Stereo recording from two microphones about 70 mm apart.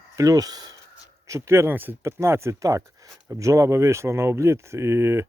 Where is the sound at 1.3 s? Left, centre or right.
Right.